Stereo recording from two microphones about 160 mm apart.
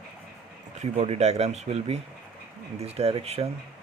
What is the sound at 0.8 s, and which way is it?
Speech, 45° right (ahead or behind).